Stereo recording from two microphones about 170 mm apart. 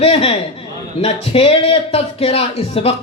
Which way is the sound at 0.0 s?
35° left (ahead or behind).